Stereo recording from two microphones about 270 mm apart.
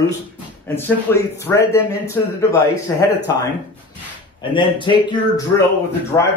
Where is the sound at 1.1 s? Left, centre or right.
Centre.